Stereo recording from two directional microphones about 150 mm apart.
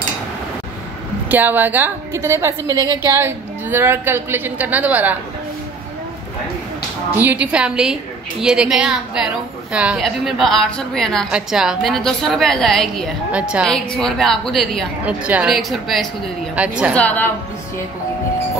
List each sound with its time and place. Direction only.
1.3 s a woman's voice: 10° right (ahead or behind)
7.2 s a woman's voice: 10° right (ahead or behind)
15.0 s a woman's voice: 10° right (ahead or behind)
16.9 s a woman's voice: 10° left (ahead or behind)